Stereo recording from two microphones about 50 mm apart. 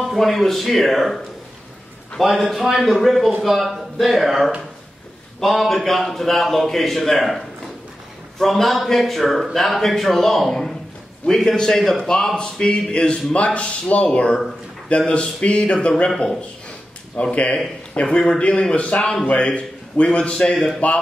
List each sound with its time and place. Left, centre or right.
0.0 s a man's voice: centre; by 15.9 s left
16.1 s a man's voice: centre
17.2 s a man's voice: left
18.4 s a man's voice: left
20.8 s speech: left